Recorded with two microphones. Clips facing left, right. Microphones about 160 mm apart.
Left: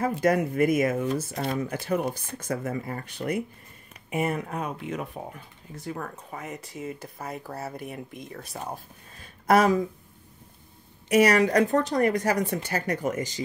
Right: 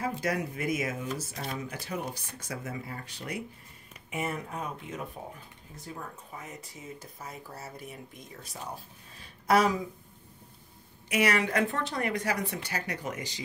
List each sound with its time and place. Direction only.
0.0 s speech: 50° left (ahead or behind)
9.2 s a sound: 50° left (ahead or behind)
11.1 s speech: 40° left (ahead or behind)